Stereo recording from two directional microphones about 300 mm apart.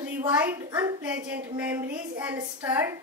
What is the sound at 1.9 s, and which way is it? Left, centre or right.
Speech, right.